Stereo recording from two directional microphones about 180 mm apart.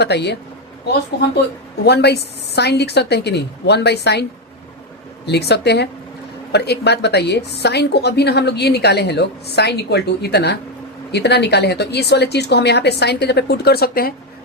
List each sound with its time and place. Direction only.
0.0 s a woman's voice: 65° left (ahead or behind)
1.8 s a woman's voice: 65° left (ahead or behind)